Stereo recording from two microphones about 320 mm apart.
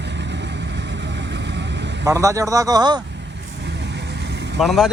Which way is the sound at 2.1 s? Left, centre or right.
Centre.